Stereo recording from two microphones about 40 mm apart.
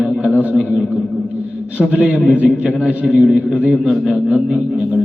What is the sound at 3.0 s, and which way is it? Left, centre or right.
A man's voice, centre.